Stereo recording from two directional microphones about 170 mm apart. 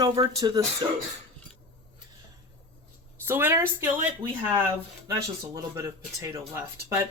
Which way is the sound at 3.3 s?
15° right (ahead or behind).